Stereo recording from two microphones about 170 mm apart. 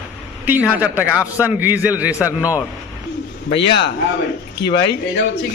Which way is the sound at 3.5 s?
85° left.